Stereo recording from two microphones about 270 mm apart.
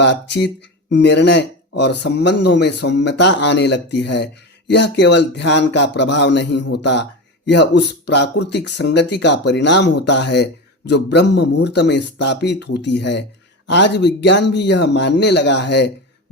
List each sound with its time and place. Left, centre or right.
0.0 s speech: left